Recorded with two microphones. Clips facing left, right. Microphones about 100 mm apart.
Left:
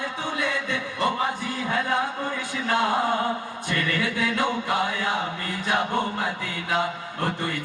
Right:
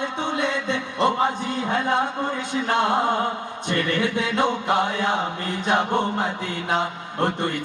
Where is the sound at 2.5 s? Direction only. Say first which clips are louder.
Right 2 dB; 20° right (ahead or behind).